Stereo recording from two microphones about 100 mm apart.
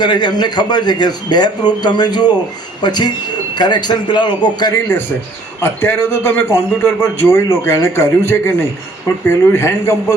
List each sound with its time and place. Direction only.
0.0 s a man's voice: 45° left (ahead or behind)
5.6 s a man's voice: 20° left (ahead or behind)